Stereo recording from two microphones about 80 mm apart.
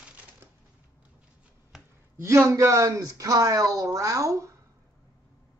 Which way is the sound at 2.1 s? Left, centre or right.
Right.